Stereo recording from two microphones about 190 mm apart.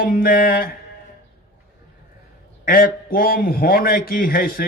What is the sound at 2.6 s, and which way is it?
A man's voice, 50° left (ahead or behind).